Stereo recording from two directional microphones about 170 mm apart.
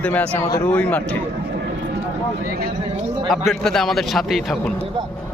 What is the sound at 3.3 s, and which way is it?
Speech, centre (ahead or behind).